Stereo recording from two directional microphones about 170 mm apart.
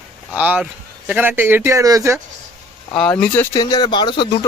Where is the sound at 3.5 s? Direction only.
25° left (ahead or behind).